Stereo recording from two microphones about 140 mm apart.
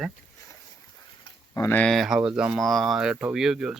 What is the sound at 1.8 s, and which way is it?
Speech, centre (ahead or behind).